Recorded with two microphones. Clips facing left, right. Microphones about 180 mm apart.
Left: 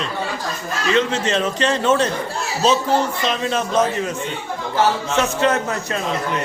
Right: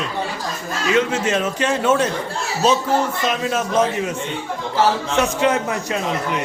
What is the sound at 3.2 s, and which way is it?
Speech, 5° right (ahead or behind).